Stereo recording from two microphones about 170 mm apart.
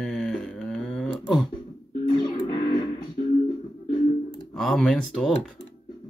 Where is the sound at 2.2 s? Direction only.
30° left (ahead or behind).